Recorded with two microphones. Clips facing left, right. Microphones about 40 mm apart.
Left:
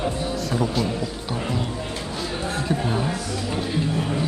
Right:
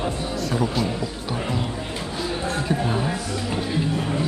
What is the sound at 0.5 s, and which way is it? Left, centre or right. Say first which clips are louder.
Speech: even; centre.